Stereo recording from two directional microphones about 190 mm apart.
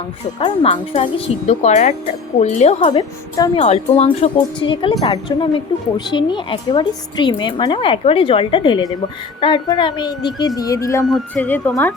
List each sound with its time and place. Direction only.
0.3 s speech: 30° left (ahead or behind)
3.6 s speech: 35° left (ahead or behind); by 11.0 s 15° left (ahead or behind)
11.0 s speech: 5° left (ahead or behind)